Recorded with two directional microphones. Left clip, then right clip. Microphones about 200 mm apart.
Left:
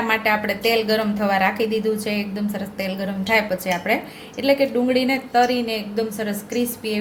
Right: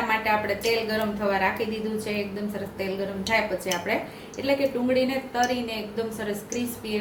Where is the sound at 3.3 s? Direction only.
55° left (ahead or behind).